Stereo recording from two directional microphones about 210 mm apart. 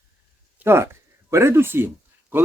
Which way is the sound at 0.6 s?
10° right (ahead or behind).